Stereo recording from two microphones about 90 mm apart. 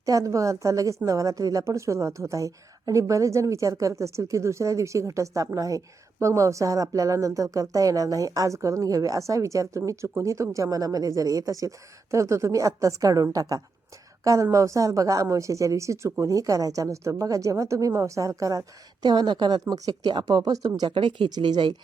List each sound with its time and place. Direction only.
0.0 s a woman's voice: 40° right (ahead or behind)
19.0 s speech: 55° right (ahead or behind)
20.1 s speech: 55° right (ahead or behind)
20.9 s speech: 70° right (ahead or behind)